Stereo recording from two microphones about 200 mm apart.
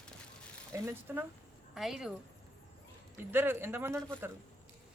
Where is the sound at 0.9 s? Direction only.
10° right (ahead or behind).